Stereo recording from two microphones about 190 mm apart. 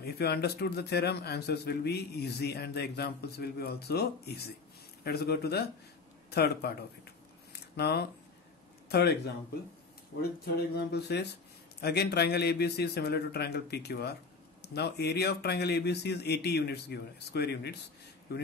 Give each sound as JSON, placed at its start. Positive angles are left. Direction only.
{"t": 0.0, "sound": "a man's voice", "side_deg": 60}
{"t": 10.4, "sound": "a man's voice", "side_deg": 60}